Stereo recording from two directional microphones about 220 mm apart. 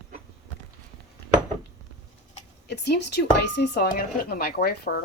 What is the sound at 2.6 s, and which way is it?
Speech, 50° left (ahead or behind).